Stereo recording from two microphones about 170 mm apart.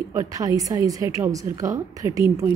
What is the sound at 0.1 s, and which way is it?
A woman's voice, 20° right (ahead or behind).